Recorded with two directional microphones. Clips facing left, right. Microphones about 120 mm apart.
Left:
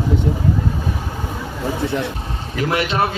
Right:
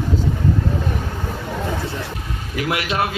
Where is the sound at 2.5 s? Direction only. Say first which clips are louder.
Left 2 dB; 30° left (ahead or behind).